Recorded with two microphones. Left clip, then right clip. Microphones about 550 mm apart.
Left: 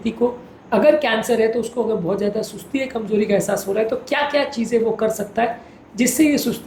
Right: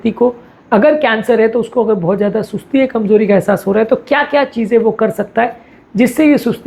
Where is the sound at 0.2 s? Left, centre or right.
Right.